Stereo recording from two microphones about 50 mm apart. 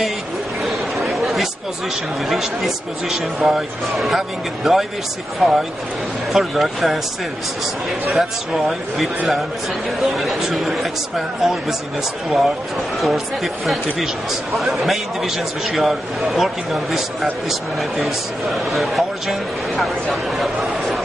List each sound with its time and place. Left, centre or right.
0.7 s chatter: centre
2.2 s a man's voice: centre
8.1 s a man's voice: centre
13.0 s a man's voice: centre